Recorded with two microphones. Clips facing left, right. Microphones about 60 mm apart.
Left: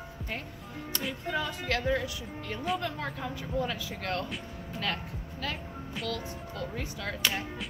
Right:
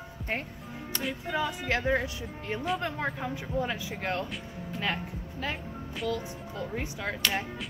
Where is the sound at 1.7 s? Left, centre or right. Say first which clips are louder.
Right 1 dB; right.